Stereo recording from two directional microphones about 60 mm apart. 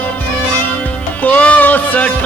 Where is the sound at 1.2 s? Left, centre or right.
Left.